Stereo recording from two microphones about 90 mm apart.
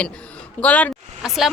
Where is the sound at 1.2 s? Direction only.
5° right (ahead or behind).